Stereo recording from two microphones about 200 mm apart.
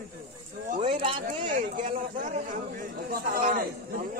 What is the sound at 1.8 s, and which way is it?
A man's voice, 40° right (ahead or behind).